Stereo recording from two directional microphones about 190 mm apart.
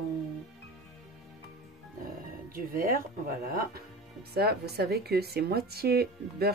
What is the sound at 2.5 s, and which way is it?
A woman's voice, 50° right (ahead or behind).